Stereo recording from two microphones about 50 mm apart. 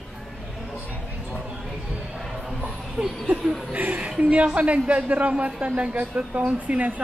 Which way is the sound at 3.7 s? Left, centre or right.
Right.